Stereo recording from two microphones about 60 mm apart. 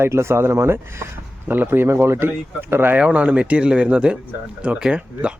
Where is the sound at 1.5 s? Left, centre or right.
Right.